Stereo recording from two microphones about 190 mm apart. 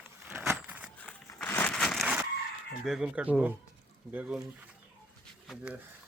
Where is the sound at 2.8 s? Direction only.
5° right (ahead or behind).